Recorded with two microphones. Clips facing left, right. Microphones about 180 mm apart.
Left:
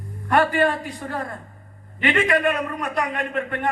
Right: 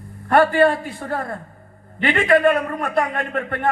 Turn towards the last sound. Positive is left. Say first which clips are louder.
# right 2 dB
turn(degrees=-40)  # may be behind; listen again after turning